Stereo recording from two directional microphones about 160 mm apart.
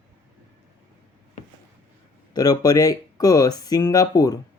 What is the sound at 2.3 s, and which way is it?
Speech, 25° left (ahead or behind).